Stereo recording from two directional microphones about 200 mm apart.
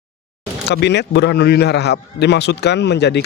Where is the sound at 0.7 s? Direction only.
60° left (ahead or behind).